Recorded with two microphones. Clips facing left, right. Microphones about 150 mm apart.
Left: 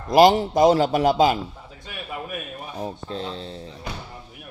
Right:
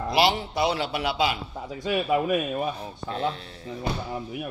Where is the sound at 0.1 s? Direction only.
45° left (ahead or behind).